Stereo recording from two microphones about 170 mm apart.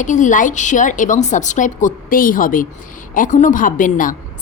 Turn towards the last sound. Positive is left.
turn(degrees=50)  # may be behind; listen again after turning